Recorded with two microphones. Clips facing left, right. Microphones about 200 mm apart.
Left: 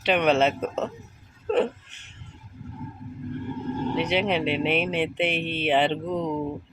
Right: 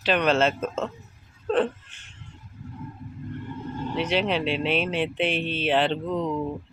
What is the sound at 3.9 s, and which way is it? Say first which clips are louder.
Mantra: right 1 dB; 60° left (ahead or behind).